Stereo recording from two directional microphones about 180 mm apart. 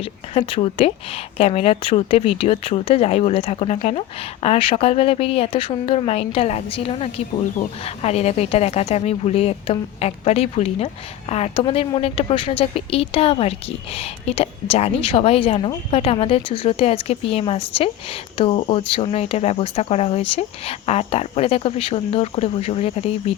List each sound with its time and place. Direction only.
0.0 s speech: 30° left (ahead or behind)